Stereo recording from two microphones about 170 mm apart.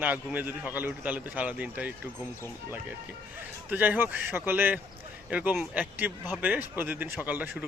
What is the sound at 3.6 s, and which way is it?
Speech, 10° right (ahead or behind).